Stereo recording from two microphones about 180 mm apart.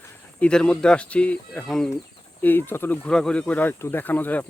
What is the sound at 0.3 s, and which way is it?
Speech, 5° left (ahead or behind).